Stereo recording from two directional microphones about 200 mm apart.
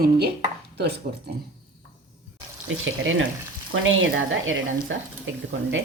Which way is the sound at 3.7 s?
80° right.